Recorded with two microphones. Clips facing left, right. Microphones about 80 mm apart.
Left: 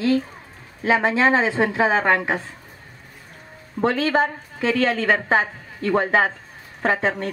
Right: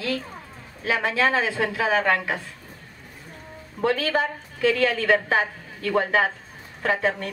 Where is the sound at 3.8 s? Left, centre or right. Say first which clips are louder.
Left 3 dB; left.